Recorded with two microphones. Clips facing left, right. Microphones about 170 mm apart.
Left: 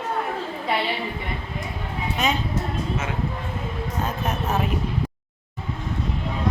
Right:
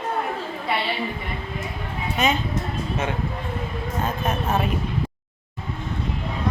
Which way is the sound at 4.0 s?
Centre (ahead or behind).